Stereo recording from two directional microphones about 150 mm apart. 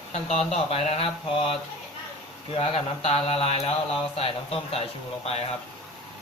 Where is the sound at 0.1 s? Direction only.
45° left (ahead or behind).